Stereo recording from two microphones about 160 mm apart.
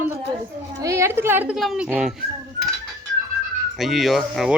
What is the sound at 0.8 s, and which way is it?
Speech, 20° right (ahead or behind).